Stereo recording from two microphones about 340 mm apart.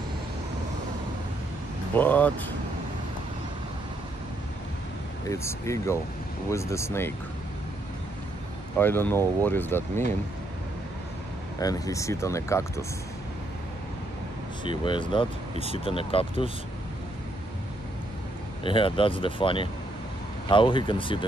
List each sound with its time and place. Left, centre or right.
2.0 s speech: centre
5.3 s speech: centre
8.7 s speech: centre
11.6 s speech: centre
14.9 s speech: centre
18.6 s speech: centre